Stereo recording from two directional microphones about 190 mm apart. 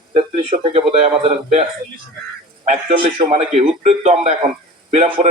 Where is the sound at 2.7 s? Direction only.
35° right (ahead or behind).